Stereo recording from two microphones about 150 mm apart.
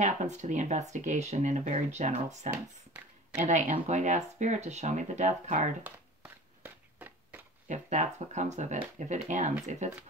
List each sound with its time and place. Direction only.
0.0 s speech: 50° right (ahead or behind)
5.9 s a sound: 10° right (ahead or behind)
7.6 s speech: 55° right (ahead or behind)